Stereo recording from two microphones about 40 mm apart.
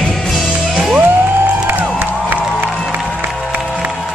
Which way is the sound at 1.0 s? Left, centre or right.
Right.